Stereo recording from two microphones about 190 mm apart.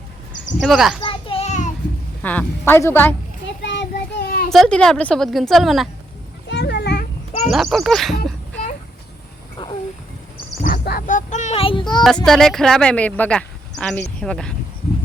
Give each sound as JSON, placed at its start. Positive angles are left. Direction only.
{"t": 0.6, "sound": "speech", "side_deg": 0}
{"t": 1.0, "sound": "children playing", "side_deg": 30}
{"t": 2.2, "sound": "a woman's voice", "side_deg": 10}
{"t": 3.6, "sound": "child singing", "side_deg": 65}
{"t": 4.5, "sound": "speech", "side_deg": 5}
{"t": 6.5, "sound": "a sound", "side_deg": 60}
{"t": 7.5, "sound": "speech", "side_deg": 0}
{"t": 10.6, "sound": "speech", "side_deg": 50}
{"t": 12.0, "sound": "speech", "side_deg": 0}